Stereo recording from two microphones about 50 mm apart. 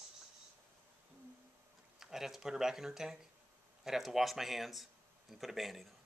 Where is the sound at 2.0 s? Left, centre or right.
Centre.